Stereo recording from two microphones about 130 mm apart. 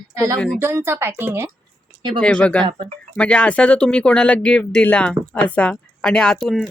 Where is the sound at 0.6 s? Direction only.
20° right (ahead or behind).